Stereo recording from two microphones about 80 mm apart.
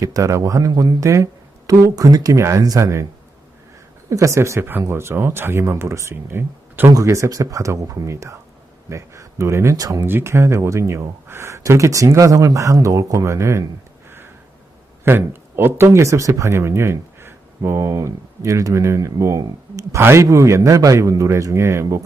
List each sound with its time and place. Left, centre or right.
0.0 s speech: right
4.1 s speech: right
6.9 s speech: right
9.7 s speech: right
10.1 s speech: right
15.0 s speech: right
20.0 s speech: right